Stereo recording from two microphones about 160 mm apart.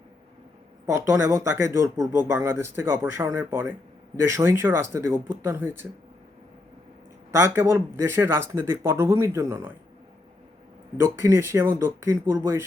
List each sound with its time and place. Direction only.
0.9 s speech: 20° right (ahead or behind)
7.3 s speech: 15° right (ahead or behind)
10.9 s speech: 15° right (ahead or behind)